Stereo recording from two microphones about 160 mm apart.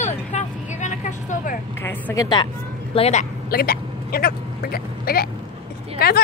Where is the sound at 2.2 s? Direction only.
30° left (ahead or behind).